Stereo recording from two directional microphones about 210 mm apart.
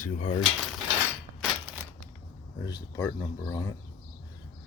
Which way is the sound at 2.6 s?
20° left (ahead or behind).